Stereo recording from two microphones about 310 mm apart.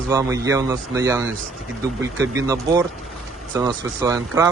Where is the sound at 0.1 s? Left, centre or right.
Centre.